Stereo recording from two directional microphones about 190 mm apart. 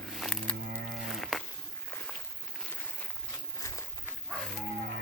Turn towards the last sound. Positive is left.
turn(degrees=15)  # may be behind; listen again after turning